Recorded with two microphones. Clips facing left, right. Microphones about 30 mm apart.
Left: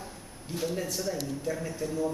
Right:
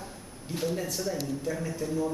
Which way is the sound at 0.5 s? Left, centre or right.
Centre.